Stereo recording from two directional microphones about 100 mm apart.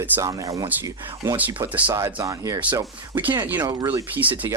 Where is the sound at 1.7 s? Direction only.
15° right (ahead or behind).